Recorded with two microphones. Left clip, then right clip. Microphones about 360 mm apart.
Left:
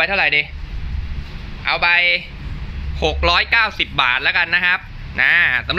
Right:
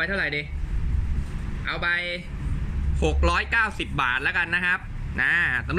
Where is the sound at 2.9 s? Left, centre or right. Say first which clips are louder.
Left 8 dB; centre.